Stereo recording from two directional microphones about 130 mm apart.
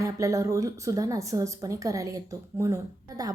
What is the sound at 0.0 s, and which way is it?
A woman's voice, 25° right (ahead or behind).